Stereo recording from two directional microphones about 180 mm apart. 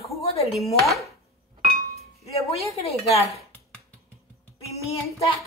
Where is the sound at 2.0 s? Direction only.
35° left (ahead or behind).